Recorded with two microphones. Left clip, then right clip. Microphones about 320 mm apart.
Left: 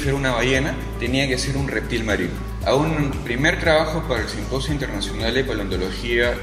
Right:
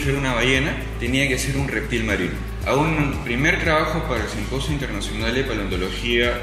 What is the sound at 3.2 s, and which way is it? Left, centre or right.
Speech, left.